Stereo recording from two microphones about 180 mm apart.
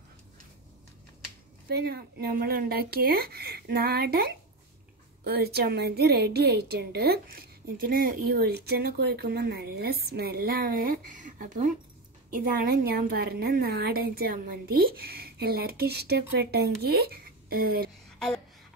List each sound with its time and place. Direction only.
1.7 s a woman's voice: 60° right (ahead or behind)